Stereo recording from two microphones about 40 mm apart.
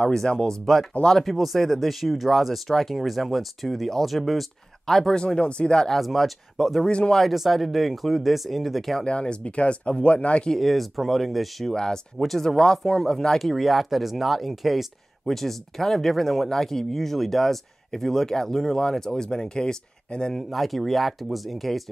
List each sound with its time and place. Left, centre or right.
0.3 s speech: centre
1.2 s speech: centre
5.1 s speech: left
5.9 s speech: centre
9.0 s speech: left
10.5 s speech: centre
11.7 s speech: centre
13.4 s speech: centre; by 20.3 s left
20.4 s speech: centre